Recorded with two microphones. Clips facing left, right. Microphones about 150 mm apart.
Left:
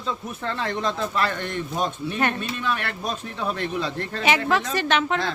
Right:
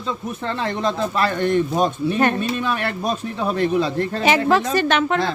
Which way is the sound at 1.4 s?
45° right (ahead or behind).